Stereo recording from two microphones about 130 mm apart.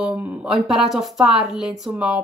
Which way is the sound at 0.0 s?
5° right (ahead or behind).